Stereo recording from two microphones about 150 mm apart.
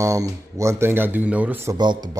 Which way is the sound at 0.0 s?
20° right (ahead or behind).